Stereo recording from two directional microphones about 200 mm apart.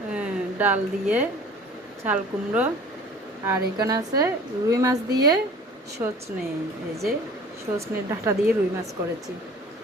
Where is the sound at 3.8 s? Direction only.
15° right (ahead or behind).